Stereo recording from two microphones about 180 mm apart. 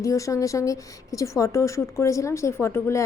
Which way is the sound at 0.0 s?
15° left (ahead or behind).